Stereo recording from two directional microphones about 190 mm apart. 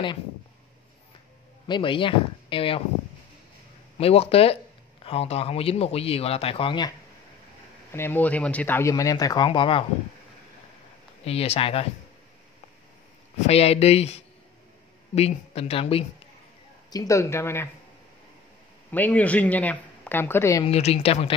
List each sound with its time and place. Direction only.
1.7 s speech: 25° left (ahead or behind)
4.0 s a man's voice: 30° left (ahead or behind)
7.9 s speech: 10° left (ahead or behind); by 9.8 s 25° left (ahead or behind)
11.2 s a man's voice: 30° left (ahead or behind)
13.5 s a man's voice: 35° left (ahead or behind)
16.9 s speech: 15° left (ahead or behind)
18.9 s speech: 10° left (ahead or behind)
20.6 s a man's voice: 30° left (ahead or behind)